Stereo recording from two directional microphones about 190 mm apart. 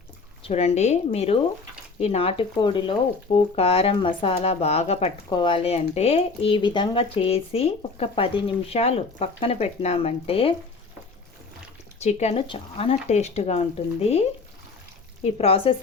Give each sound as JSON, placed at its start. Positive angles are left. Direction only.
{"t": 0.4, "sound": "speech", "side_deg": 35}
{"t": 11.9, "sound": "speech", "side_deg": 35}